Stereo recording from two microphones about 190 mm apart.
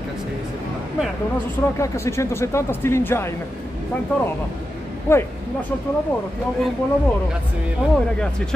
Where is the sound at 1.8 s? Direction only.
15° left (ahead or behind).